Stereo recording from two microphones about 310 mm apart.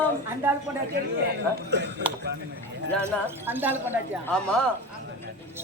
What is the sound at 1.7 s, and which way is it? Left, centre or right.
Speech, right.